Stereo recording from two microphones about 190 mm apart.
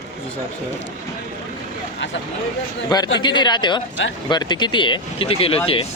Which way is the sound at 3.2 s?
25° left (ahead or behind).